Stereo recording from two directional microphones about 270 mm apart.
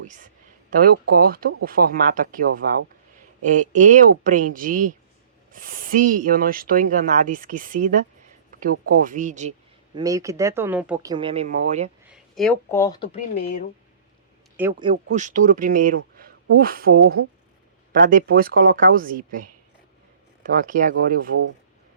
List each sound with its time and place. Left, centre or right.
0.7 s speech: right
3.4 s speech: right
10.0 s speech: centre
12.1 s speech: centre; by 13.7 s left
14.5 s a man's voice: centre
15.1 s speech: right
16.1 s a sound: right
17.0 s speech: right
20.4 s speech: right